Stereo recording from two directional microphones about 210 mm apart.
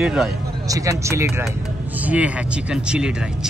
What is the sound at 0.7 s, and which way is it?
Speech, 15° right (ahead or behind).